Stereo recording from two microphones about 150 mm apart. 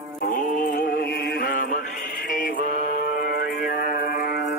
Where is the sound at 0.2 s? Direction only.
65° left (ahead or behind).